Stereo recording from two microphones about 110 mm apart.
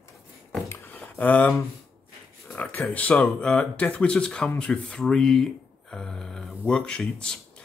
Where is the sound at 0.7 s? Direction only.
15° left (ahead or behind).